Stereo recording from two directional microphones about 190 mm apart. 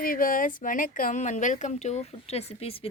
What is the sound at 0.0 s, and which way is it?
Speech, 50° left (ahead or behind).